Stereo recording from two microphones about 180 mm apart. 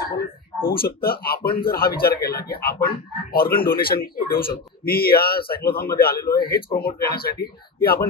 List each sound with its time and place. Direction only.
0.1 s speech: 55° left (ahead or behind)